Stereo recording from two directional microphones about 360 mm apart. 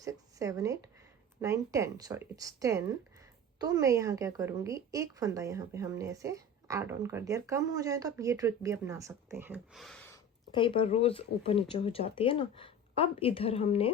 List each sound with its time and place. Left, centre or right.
0.0 s a woman's voice: centre
10.5 s speech: centre